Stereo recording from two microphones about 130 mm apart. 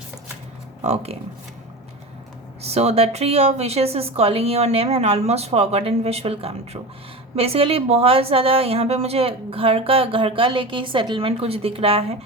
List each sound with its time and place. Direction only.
2.6 s a woman's voice: 55° right (ahead or behind)